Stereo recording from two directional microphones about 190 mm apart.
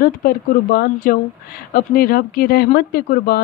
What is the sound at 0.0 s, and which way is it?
A woman's voice, 50° left (ahead or behind).